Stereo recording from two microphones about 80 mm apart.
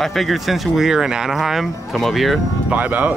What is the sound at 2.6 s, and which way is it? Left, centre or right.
Speech, centre.